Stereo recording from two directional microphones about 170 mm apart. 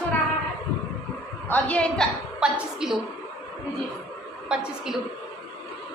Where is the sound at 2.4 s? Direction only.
5° right (ahead or behind).